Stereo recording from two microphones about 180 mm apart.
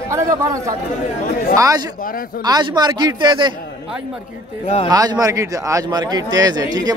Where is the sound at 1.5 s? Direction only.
20° right (ahead or behind).